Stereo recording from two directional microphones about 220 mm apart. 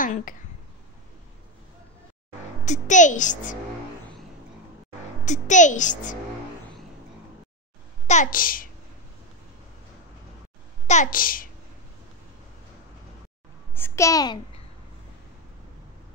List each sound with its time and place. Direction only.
0.0 s speech: 40° left (ahead or behind)
2.6 s a child's voice: 35° left (ahead or behind)
5.2 s a child's voice: 35° left (ahead or behind)
8.1 s a child's voice: 35° left (ahead or behind)
10.9 s a child's voice: 35° left (ahead or behind)
13.7 s a child's voice: 10° left (ahead or behind)